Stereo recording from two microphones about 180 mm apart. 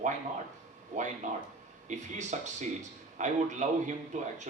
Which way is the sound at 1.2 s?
40° right (ahead or behind).